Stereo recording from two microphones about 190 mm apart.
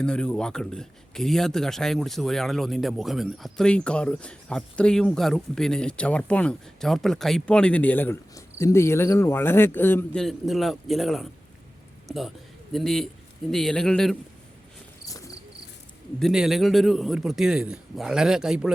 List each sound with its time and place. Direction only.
0.0 s a man's voice: 5° left (ahead or behind)
15.0 s cricket: 15° left (ahead or behind)
16.2 s a man's voice: centre (ahead or behind)